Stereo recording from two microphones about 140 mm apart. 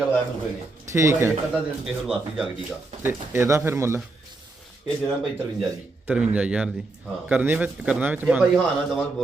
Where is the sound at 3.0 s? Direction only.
20° right (ahead or behind).